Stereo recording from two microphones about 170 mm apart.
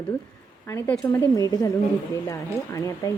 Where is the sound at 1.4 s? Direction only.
20° left (ahead or behind).